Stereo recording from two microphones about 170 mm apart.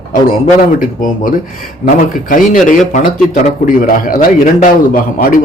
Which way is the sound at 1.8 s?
55° left (ahead or behind).